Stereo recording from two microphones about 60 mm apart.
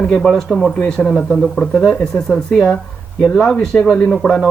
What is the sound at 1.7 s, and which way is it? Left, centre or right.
Speech, centre.